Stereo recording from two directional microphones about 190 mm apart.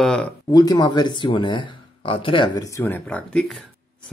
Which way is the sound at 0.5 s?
20° left (ahead or behind).